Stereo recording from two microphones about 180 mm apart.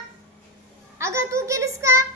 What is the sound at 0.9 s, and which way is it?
A child's voice, 15° right (ahead or behind).